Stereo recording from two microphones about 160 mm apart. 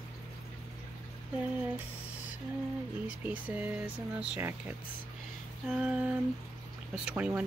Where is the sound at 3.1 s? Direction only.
10° right (ahead or behind).